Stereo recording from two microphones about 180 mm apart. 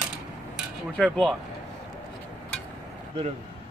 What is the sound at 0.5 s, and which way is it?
Speech, centre (ahead or behind).